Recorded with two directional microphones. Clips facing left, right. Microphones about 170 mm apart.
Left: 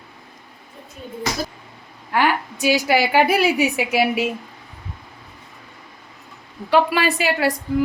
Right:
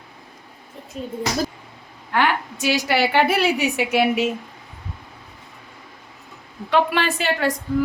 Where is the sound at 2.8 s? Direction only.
10° left (ahead or behind).